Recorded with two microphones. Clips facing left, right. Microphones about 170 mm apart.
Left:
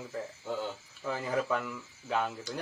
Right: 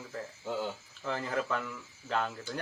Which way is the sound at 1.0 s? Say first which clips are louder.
Left 1 dB; 5° left (ahead or behind).